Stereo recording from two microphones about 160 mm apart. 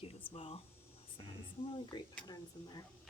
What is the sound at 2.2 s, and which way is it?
Speech, 25° left (ahead or behind).